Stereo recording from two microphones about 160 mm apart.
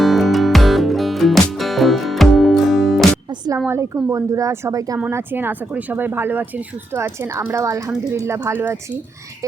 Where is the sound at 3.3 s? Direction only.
25° right (ahead or behind).